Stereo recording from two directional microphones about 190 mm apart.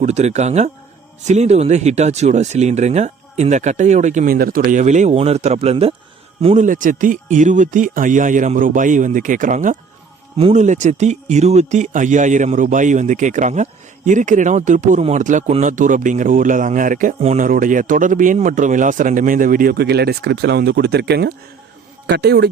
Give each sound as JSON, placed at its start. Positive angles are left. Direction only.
{"t": 0.0, "sound": "speech", "side_deg": -35}